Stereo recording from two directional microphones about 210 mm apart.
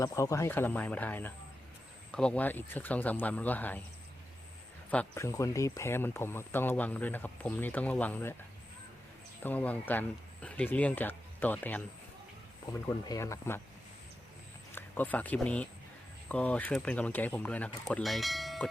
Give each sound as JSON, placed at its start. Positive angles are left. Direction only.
{"t": 0.0, "sound": "speech", "side_deg": 15}
{"t": 4.9, "sound": "speech", "side_deg": 10}
{"t": 9.4, "sound": "speech", "side_deg": 10}
{"t": 12.8, "sound": "speech", "side_deg": 15}
{"t": 14.7, "sound": "speech", "side_deg": 10}